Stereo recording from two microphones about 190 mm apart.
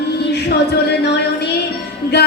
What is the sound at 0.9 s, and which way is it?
A woman's voice, 60° left (ahead or behind).